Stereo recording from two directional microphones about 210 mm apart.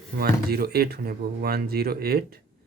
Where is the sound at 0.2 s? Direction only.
45° right (ahead or behind).